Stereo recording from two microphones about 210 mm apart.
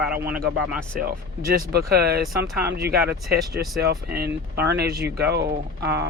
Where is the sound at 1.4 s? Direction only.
45° right (ahead or behind).